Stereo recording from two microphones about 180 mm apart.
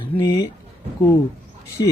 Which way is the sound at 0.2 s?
20° left (ahead or behind).